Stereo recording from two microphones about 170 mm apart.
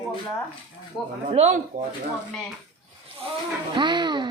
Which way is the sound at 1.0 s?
Centre (ahead or behind).